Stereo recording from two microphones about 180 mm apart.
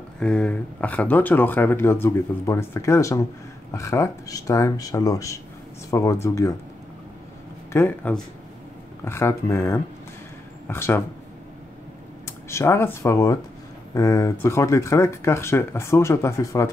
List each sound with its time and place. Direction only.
0.2 s speech: 5° left (ahead or behind)
7.7 s speech: 10° left (ahead or behind)
12.3 s speech: 15° left (ahead or behind)